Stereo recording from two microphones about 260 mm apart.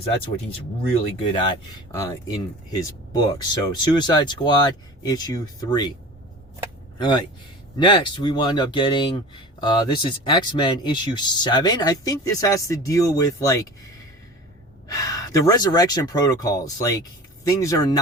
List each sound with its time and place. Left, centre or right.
1.2 s speech: centre
7.0 s speech: centre
14.8 s speech: centre